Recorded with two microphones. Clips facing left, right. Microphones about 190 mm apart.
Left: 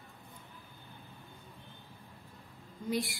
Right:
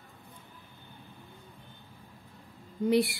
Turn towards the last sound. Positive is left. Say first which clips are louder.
# right 9 dB
turn(degrees=-65)  # may be behind; listen again after turning